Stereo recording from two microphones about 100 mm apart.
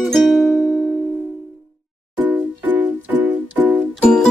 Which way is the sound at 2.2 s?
20° right (ahead or behind).